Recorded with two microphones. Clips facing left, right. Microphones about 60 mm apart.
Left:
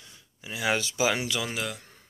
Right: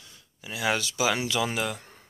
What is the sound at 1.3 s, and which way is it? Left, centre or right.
Speech, centre.